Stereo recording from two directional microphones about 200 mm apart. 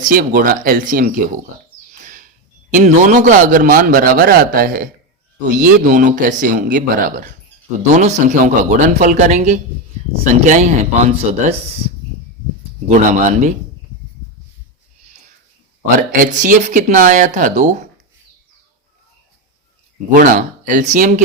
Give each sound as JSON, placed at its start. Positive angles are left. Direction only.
{"t": 0.0, "sound": "a man's voice", "side_deg": -45}
{"t": 7.8, "sound": "speech", "side_deg": -35}
{"t": 12.9, "sound": "speech", "side_deg": -35}
{"t": 16.1, "sound": "speech", "side_deg": -40}
{"t": 20.1, "sound": "speech", "side_deg": -40}